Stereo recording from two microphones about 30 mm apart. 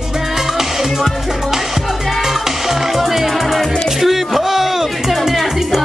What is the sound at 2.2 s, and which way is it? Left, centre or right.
Music, centre.